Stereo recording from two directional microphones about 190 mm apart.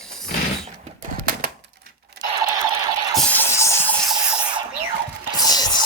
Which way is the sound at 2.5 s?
20° right (ahead or behind).